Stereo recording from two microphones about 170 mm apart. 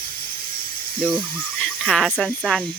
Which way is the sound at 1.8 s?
Centre (ahead or behind).